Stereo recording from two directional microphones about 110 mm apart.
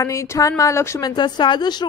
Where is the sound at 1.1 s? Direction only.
45° left (ahead or behind).